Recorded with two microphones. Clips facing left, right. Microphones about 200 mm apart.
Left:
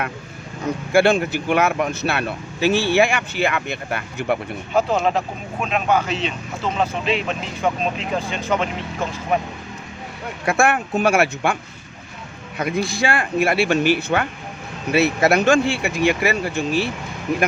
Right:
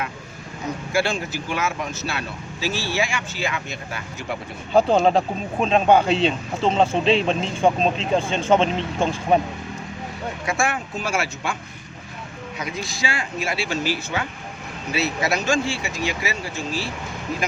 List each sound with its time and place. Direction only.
0.9 s speech: 60° left (ahead or behind)
4.7 s speech: 30° right (ahead or behind)
10.4 s speech: 60° left (ahead or behind)
12.5 s speech: 55° left (ahead or behind)